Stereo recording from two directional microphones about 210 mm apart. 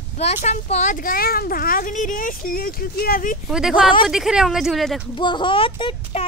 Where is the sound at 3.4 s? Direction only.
Centre (ahead or behind).